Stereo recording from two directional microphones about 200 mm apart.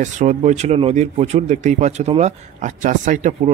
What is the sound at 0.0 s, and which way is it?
Speech, 35° right (ahead or behind).